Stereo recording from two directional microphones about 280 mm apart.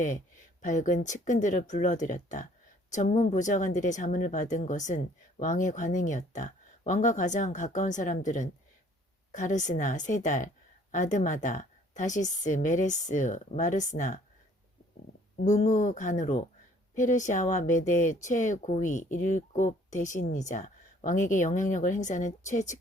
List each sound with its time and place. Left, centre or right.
0.6 s speech: left
15.4 s speech: left